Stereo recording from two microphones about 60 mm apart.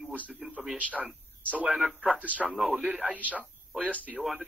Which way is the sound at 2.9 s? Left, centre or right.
Centre.